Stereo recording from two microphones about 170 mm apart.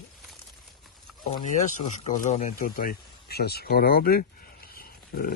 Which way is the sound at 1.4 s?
50° left (ahead or behind).